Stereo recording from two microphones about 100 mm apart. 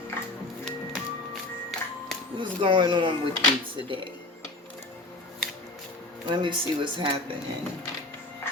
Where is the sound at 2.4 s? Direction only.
50° right (ahead or behind).